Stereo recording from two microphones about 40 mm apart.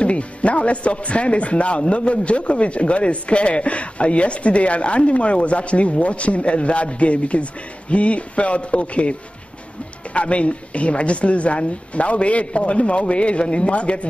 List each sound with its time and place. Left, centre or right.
0.0 s speech: left
10.1 s speech: left